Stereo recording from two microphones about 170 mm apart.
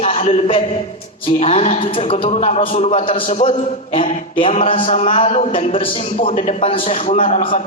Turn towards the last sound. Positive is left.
turn(degrees=30)  # may be behind; listen again after turning